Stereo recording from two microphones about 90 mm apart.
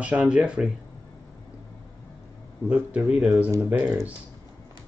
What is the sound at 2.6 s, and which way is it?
A man's voice, 15° right (ahead or behind).